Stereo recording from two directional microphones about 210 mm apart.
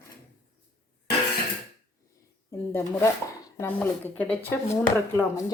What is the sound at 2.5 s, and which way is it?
Speech, 10° left (ahead or behind).